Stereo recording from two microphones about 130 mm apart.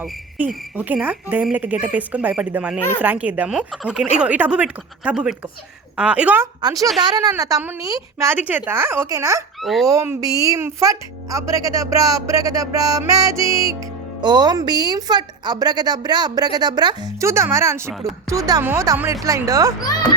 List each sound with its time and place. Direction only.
0.4 s speech: 15° right (ahead or behind)
6.6 s a woman's voice: 30° right (ahead or behind)
8.4 s a woman's voice: 15° right (ahead or behind)
9.6 s speech: centre (ahead or behind)
9.8 s a woman's voice: 25° right (ahead or behind)
17.2 s a woman's voice: 20° right (ahead or behind)